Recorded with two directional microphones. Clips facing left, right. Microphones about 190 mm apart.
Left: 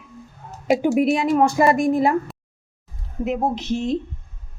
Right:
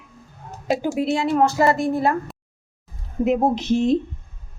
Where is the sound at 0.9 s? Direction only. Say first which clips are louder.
Left 2 dB; 15° left (ahead or behind).